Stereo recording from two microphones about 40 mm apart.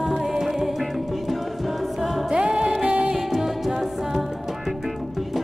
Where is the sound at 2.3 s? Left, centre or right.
Right.